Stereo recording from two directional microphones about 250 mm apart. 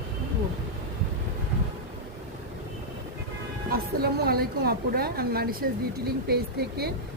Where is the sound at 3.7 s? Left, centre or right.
Right.